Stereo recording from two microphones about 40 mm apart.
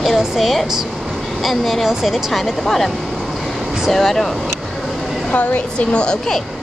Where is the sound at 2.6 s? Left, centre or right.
Centre.